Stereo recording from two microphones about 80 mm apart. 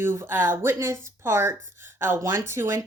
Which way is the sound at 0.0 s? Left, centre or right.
Right.